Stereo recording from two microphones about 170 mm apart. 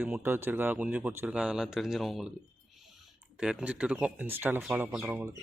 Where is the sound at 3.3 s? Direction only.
5° right (ahead or behind).